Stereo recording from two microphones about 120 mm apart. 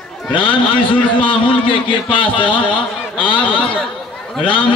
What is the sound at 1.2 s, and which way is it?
A man's voice, 45° left (ahead or behind).